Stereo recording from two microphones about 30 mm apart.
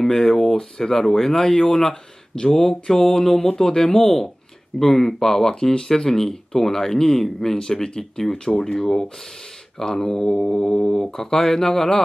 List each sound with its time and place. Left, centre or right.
0.1 s speech: centre
3.9 s speech: centre